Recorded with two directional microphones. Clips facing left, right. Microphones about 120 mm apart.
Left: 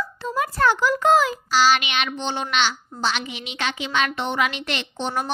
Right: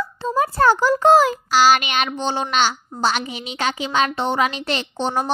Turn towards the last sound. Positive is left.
turn(degrees=-35)  # may be behind; listen again after turning